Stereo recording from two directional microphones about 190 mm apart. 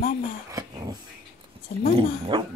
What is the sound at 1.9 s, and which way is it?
Speech, 30° right (ahead or behind).